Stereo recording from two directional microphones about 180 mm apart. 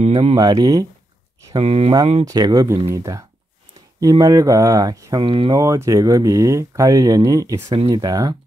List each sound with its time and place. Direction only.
0.0 s speech: 35° right (ahead or behind)
1.5 s speech: 35° right (ahead or behind)
2.2 s speech: 20° right (ahead or behind)
5.6 s speech: 15° right (ahead or behind)